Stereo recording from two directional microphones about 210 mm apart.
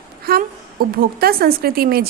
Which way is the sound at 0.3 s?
45° right (ahead or behind).